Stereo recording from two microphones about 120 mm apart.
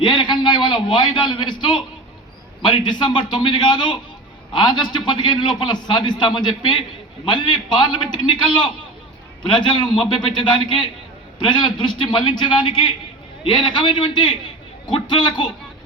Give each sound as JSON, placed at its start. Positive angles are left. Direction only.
{"t": 0.0, "sound": "a sound", "side_deg": 40}
{"t": 2.6, "sound": "a man's voice", "side_deg": 40}
{"t": 10.3, "sound": "a man's voice", "side_deg": 40}